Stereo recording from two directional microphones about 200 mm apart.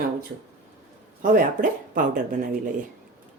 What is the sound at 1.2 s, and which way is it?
Speech, 45° right (ahead or behind).